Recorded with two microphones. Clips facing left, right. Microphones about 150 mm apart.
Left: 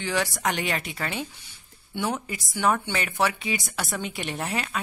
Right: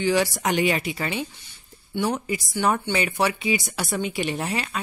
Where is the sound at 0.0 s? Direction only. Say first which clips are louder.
Right 5 dB; 5° right (ahead or behind).